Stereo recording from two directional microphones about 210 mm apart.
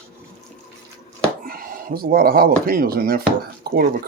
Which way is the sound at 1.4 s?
45° right (ahead or behind).